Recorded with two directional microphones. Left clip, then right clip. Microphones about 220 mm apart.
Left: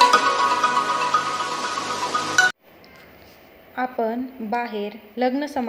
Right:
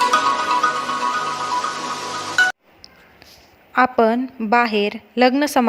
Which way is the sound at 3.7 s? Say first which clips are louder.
Right 9 dB; 45° right (ahead or behind).